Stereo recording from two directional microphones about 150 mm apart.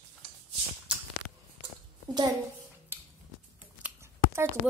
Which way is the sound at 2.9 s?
15° right (ahead or behind).